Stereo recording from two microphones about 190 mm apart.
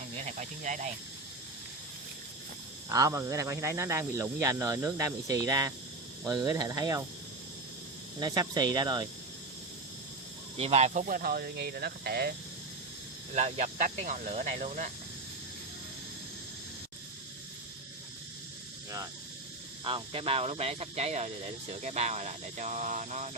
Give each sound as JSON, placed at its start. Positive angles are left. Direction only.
{"t": 0.3, "sound": "speech", "side_deg": -40}
{"t": 2.9, "sound": "speech", "side_deg": -15}
{"t": 8.2, "sound": "speech", "side_deg": -20}
{"t": 10.6, "sound": "speech", "side_deg": -35}
{"t": 13.3, "sound": "speech", "side_deg": -40}
{"t": 19.8, "sound": "speech", "side_deg": -30}